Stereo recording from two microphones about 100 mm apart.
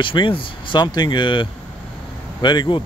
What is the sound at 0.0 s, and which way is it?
Speech, 55° left (ahead or behind).